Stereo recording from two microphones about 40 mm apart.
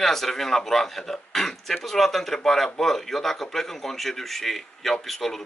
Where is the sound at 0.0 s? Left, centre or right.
Centre.